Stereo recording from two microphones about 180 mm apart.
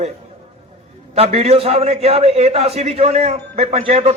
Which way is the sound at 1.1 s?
35° right (ahead or behind).